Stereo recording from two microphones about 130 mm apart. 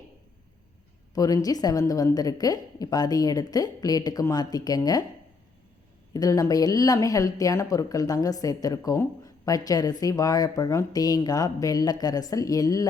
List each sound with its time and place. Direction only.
1.1 s speech: 30° left (ahead or behind)
6.1 s speech: 25° left (ahead or behind)